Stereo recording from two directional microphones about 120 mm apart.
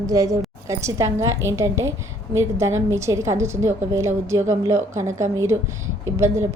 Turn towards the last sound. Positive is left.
turn(degrees=-25)  # may be behind; listen again after turning